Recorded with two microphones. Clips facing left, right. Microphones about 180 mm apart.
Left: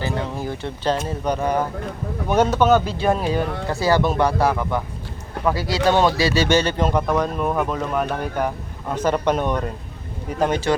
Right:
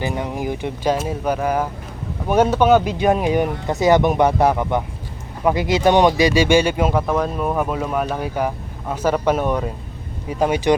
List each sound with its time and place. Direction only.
0.0 s speech: 15° right (ahead or behind)